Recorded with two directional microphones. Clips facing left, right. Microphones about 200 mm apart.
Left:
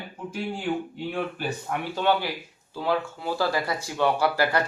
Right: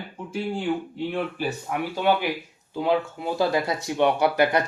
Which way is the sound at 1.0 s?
5° right (ahead or behind).